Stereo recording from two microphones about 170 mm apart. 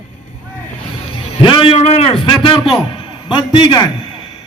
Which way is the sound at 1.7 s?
40° left (ahead or behind).